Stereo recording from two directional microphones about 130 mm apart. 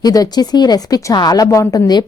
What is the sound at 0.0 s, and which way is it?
Speech, 30° left (ahead or behind).